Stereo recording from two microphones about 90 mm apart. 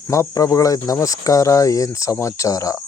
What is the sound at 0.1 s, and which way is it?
Speech, 35° left (ahead or behind).